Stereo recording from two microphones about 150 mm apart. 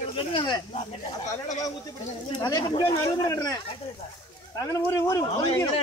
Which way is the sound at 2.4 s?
30° left (ahead or behind).